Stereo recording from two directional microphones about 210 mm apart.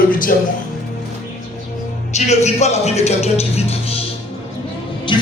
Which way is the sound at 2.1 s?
30° left (ahead or behind).